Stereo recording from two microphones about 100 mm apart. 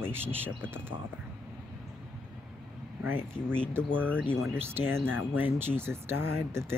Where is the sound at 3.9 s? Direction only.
20° right (ahead or behind).